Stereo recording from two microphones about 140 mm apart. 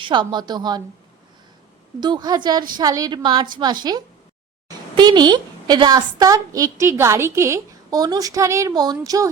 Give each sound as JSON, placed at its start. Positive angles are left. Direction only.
{"t": 0.0, "sound": "a woman's voice", "side_deg": -35}
{"t": 2.0, "sound": "a woman's voice", "side_deg": -30}